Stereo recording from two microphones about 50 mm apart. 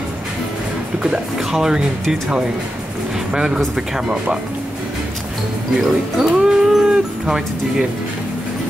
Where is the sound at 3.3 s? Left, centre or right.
Centre.